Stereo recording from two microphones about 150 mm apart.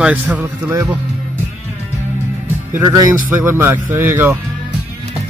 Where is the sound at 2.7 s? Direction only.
20° right (ahead or behind).